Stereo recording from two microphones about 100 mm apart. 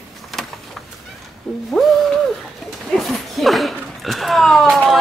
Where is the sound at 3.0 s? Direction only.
Centre (ahead or behind).